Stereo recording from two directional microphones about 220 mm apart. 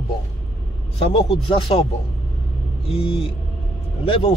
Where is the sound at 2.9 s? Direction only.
25° left (ahead or behind).